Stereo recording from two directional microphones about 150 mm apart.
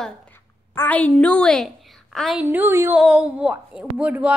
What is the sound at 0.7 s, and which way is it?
A woman's voice, 10° left (ahead or behind).